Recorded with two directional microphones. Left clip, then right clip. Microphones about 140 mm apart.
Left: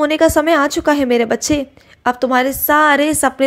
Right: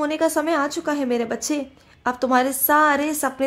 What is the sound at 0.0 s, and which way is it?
A woman's voice, 25° left (ahead or behind).